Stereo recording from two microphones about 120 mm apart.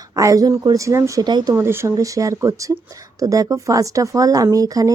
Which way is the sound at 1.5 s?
20° right (ahead or behind).